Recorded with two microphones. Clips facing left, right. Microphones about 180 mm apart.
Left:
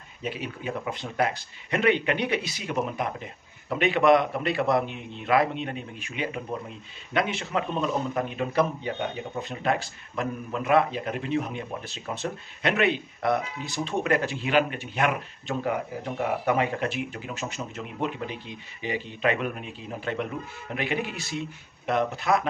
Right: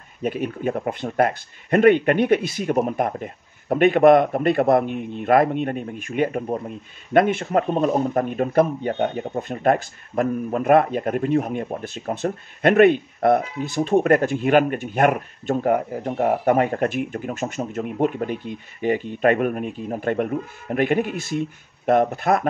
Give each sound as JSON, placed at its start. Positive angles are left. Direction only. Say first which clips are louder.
{"t": 0.2, "sound": "speech", "louder": "right 9 dB", "side_deg": -50}